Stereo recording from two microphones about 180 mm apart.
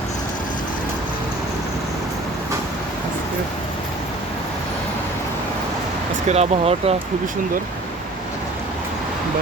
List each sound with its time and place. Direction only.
6.2 s speech: 35° right (ahead or behind)